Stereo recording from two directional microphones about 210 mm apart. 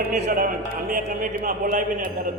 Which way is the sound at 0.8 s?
40° right (ahead or behind).